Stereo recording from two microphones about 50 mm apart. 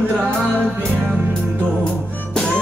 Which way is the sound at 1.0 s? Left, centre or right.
Right.